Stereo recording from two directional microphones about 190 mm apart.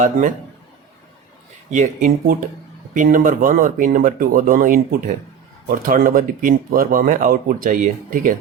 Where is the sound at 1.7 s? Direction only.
40° right (ahead or behind).